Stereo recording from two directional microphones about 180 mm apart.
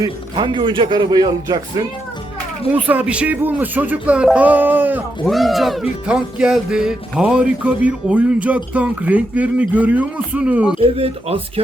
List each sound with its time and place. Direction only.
0.0 s a man's voice: 25° right (ahead or behind)
2.7 s speech: 10° right (ahead or behind)
5.2 s speech: centre (ahead or behind)
10.8 s speech: 30° right (ahead or behind)